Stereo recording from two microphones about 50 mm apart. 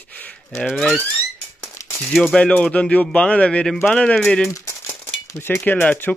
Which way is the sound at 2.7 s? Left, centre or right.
Left.